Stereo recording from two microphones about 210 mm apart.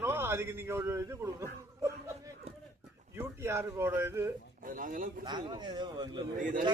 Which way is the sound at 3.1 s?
10° right (ahead or behind).